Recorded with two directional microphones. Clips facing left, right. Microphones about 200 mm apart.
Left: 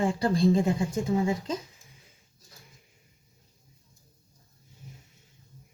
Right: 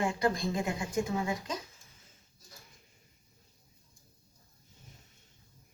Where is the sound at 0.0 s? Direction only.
30° left (ahead or behind).